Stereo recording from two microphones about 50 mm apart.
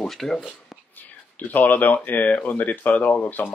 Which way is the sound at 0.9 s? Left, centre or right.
Left.